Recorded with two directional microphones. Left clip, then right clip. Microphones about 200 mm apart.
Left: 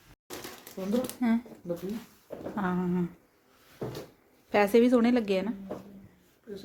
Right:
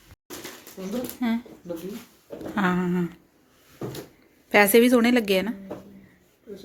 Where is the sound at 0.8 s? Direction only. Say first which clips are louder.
Left 1 dB; 40° left (ahead or behind).